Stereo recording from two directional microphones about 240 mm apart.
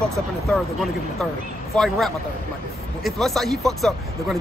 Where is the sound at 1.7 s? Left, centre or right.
Centre.